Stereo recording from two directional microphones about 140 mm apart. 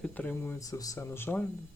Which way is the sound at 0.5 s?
25° left (ahead or behind).